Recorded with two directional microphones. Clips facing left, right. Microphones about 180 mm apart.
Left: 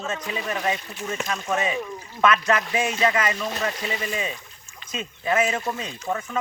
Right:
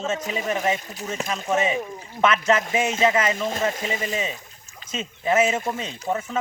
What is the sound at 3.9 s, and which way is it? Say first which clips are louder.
Speech: right 1 dB; 20° right (ahead or behind).